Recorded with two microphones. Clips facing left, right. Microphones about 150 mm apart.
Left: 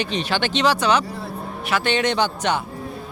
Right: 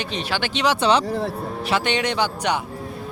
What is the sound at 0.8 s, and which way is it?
Speech, 30° right (ahead or behind).